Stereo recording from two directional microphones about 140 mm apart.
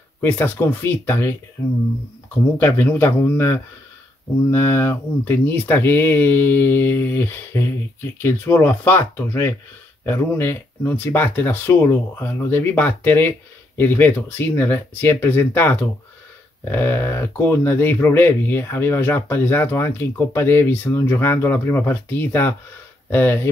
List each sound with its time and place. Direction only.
0.2 s speech: 15° left (ahead or behind)
2.6 s speech: 15° left (ahead or behind)